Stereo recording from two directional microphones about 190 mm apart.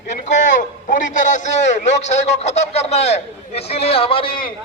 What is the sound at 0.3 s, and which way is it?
A man's voice, 40° left (ahead or behind).